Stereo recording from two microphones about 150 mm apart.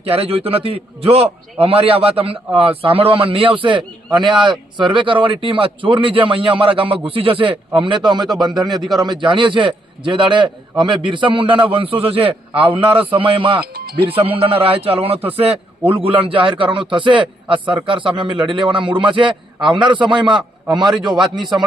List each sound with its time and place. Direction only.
0.1 s a man's voice: 40° right (ahead or behind)